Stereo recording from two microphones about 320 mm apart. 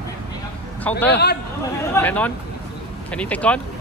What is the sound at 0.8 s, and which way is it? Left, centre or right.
Speech, centre.